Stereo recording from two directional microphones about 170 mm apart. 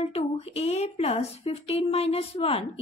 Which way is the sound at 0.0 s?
35° left (ahead or behind).